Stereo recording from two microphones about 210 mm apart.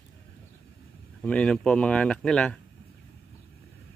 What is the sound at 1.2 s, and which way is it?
Speech, 5° left (ahead or behind).